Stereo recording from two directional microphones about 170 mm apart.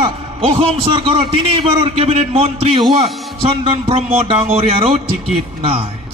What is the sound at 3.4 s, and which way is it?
Speech, 30° right (ahead or behind).